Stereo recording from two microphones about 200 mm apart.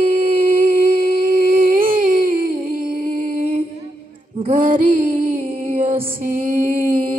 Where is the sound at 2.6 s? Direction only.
45° right (ahead or behind).